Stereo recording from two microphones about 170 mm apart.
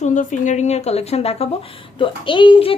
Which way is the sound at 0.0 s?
50° left (ahead or behind).